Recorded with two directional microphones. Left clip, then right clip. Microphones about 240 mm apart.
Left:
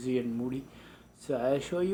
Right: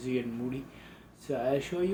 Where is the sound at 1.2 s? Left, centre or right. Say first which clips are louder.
Left 1 dB; left.